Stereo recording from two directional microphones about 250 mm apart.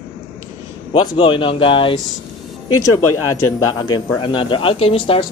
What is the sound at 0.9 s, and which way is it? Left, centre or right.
A man's voice, centre.